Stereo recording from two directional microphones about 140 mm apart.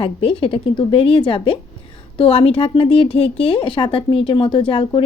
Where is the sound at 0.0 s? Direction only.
40° left (ahead or behind).